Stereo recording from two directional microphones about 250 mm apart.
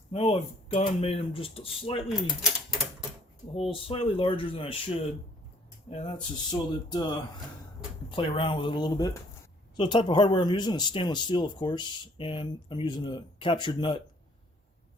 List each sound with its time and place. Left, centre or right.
0.1 s speech: left
2.0 s speech: centre
3.5 s speech: left
8.1 s speech: centre